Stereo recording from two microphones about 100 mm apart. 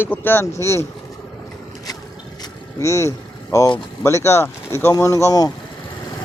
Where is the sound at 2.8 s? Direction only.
30° left (ahead or behind).